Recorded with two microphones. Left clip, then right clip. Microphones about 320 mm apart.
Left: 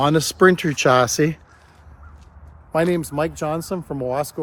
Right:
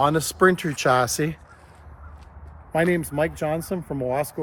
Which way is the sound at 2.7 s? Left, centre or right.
Centre.